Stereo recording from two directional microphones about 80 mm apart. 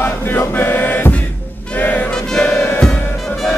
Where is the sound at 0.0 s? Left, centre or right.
Left.